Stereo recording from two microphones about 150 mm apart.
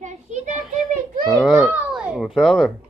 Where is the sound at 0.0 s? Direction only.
55° right (ahead or behind).